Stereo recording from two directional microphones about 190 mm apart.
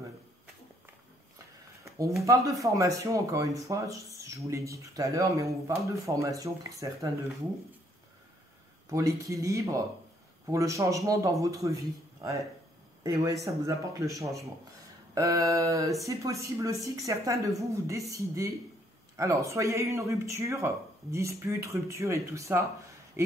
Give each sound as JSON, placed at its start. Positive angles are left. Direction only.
{"t": 2.2, "sound": "speech", "side_deg": -15}
{"t": 8.8, "sound": "speech", "side_deg": -15}
{"t": 23.2, "sound": "a sound", "side_deg": -15}